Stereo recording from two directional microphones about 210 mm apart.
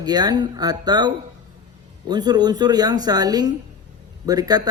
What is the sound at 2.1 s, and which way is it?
A man's voice, 20° right (ahead or behind).